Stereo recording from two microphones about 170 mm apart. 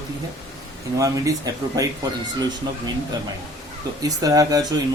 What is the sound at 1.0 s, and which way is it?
Speech, 20° right (ahead or behind).